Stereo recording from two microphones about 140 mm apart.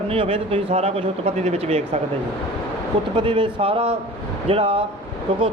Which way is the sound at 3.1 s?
40° right (ahead or behind).